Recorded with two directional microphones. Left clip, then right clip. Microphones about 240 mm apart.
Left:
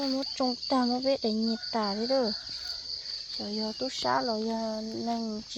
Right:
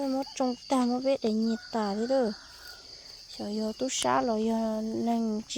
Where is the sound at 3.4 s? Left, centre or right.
Right.